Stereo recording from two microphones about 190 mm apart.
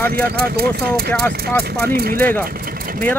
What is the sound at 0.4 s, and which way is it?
Speech, 55° right (ahead or behind).